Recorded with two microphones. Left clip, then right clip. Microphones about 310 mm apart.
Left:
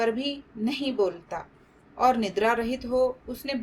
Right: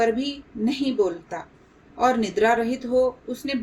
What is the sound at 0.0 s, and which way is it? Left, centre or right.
A woman's voice, left.